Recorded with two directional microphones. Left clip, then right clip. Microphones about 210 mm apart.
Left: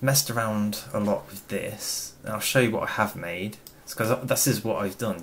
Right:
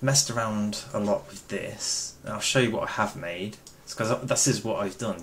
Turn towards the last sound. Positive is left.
turn(degrees=15)  # may be behind; listen again after turning